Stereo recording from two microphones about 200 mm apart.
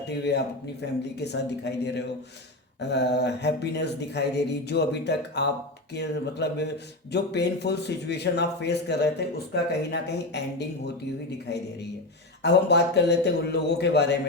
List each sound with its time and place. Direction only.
0.3 s a man's voice: 55° left (ahead or behind)
12.4 s a man's voice: 60° left (ahead or behind)